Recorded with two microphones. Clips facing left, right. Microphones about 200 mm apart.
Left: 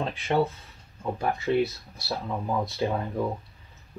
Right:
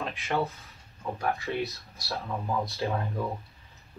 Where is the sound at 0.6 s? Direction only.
30° left (ahead or behind).